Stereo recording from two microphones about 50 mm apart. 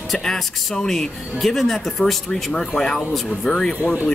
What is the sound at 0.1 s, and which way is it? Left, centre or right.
Speech, centre.